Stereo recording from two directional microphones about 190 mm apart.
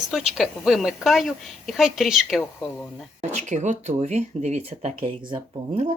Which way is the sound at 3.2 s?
40° right (ahead or behind).